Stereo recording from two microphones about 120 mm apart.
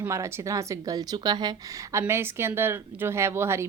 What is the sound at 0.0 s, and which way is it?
A woman's voice, 25° right (ahead or behind).